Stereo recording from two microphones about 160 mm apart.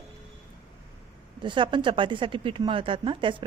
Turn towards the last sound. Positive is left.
turn(degrees=-30)  # may be behind; listen again after turning